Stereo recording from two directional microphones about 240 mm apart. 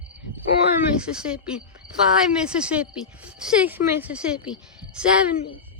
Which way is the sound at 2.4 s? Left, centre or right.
Centre.